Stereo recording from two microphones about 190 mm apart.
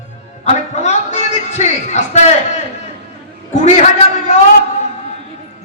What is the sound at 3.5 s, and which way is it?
Speech, 35° left (ahead or behind).